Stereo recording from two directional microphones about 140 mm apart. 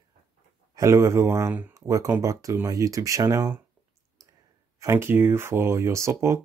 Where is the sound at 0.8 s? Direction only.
20° right (ahead or behind).